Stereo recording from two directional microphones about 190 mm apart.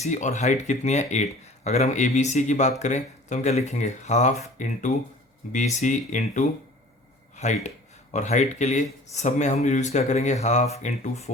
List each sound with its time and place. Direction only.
0.0 s speech: 40° left (ahead or behind)